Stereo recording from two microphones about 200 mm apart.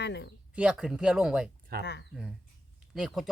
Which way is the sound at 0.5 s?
5° right (ahead or behind).